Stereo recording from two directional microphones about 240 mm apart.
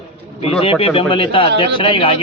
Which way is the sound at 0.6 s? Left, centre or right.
Left.